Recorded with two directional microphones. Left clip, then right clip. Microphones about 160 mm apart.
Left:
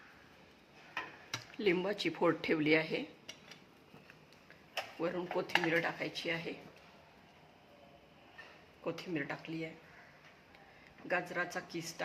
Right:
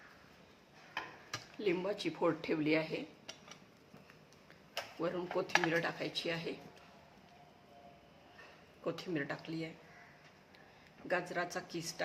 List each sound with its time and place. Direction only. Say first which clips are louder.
1.5 s speech: left 3 dB; 25° left (ahead or behind)
4.9 s speech: even; centre (ahead or behind)
5.6 s a woman's voice: left 1 dB; 10° right (ahead or behind)
8.8 s a woman's voice: even; 10° right (ahead or behind)
11.1 s a woman's voice: left 1 dB; 10° right (ahead or behind)